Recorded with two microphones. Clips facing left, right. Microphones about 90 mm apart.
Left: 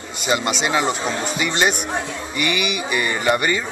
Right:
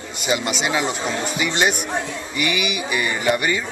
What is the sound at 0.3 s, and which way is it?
Speech, 5° right (ahead or behind).